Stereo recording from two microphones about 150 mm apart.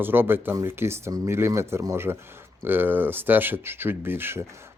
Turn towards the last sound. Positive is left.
turn(degrees=-15)  # may be behind; listen again after turning